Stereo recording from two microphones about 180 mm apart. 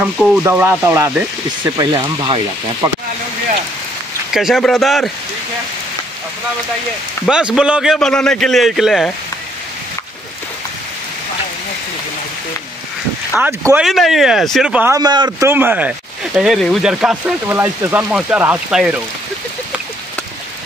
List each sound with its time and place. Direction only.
0.0 s a man's voice: centre (ahead or behind)
0.4 s a man's voice: 15° right (ahead or behind)
4.3 s a man's voice: centre (ahead or behind)
7.2 s a man's voice: 5° right (ahead or behind)
13.3 s a man's voice: 10° right (ahead or behind)
13.8 s a man's voice: centre (ahead or behind)
15.0 s a man's voice: 20° right (ahead or behind); by 18.9 s 5° right (ahead or behind)